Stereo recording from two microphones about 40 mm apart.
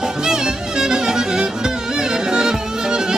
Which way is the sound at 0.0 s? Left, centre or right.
Centre.